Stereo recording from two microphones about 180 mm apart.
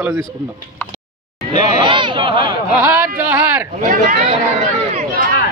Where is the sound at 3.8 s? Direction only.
50° right (ahead or behind).